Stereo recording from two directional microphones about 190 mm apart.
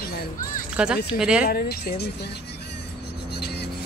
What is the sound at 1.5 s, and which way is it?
Speech, 55° left (ahead or behind).